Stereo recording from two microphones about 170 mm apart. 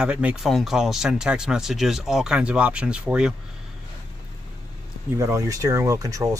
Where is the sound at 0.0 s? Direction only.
5° right (ahead or behind).